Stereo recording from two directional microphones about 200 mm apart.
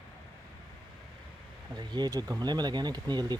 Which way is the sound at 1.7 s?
20° right (ahead or behind).